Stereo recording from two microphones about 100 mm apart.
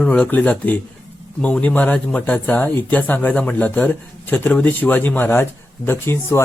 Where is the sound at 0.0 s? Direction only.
10° left (ahead or behind).